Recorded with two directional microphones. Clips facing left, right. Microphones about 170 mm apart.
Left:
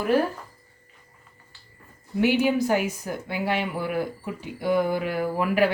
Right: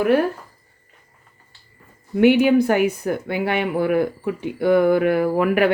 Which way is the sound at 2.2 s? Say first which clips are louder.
Right 7 dB; 60° right (ahead or behind).